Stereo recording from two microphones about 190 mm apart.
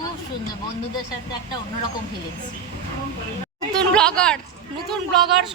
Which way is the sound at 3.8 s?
5° left (ahead or behind).